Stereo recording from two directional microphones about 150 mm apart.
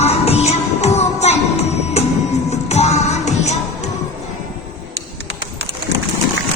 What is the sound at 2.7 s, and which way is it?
Music, 45° left (ahead or behind).